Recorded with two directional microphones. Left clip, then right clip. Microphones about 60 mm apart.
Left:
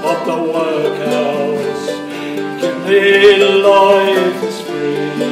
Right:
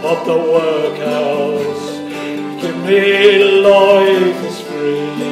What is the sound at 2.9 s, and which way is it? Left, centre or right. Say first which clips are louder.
Music: left 1 dB; right.